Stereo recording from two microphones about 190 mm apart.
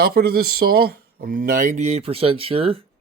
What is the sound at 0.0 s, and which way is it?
Speech, 55° right (ahead or behind).